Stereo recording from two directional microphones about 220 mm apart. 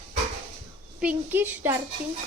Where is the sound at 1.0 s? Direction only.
5° right (ahead or behind).